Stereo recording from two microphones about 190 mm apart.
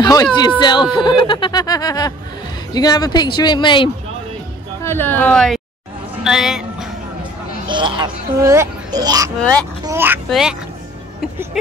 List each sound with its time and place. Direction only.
0.0 s speech: 20° left (ahead or behind)
4.8 s speech: 10° left (ahead or behind)
6.2 s music: centre (ahead or behind)
7.6 s speech: 25° right (ahead or behind)
9.4 s speech: 5° left (ahead or behind)
9.8 s a child's voice: 10° right (ahead or behind)